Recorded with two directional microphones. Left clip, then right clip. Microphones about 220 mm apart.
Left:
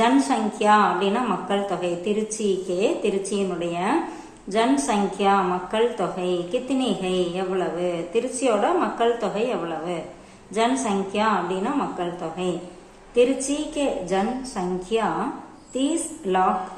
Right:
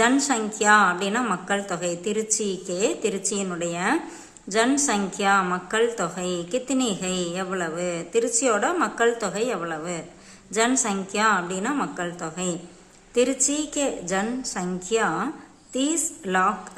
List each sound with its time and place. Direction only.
0.0 s a woman's voice: 30° right (ahead or behind)